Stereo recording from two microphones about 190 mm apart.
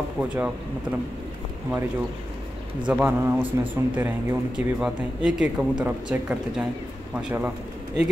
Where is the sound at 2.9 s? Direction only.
10° right (ahead or behind).